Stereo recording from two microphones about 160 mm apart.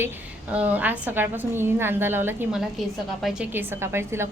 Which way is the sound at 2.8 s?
Centre (ahead or behind).